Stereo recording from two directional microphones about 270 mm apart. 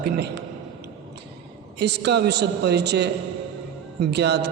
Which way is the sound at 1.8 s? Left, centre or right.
Right.